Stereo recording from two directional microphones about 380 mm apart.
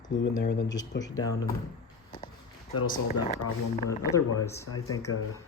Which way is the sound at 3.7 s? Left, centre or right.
Centre.